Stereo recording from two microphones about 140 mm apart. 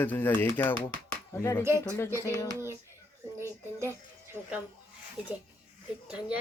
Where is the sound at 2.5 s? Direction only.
20° right (ahead or behind).